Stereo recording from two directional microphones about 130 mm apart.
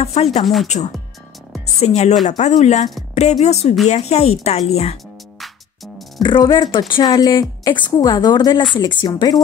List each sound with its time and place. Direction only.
0.0 s speech: 55° left (ahead or behind)
6.2 s a woman's voice: 40° left (ahead or behind)